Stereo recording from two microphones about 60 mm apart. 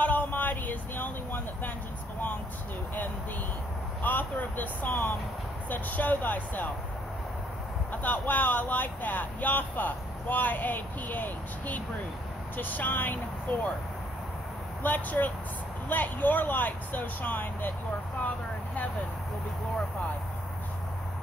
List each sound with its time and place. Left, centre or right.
0.0 s vehicle: left
4.0 s vehicle: left
5.7 s speech: left
7.9 s speech: left
14.8 s speech: left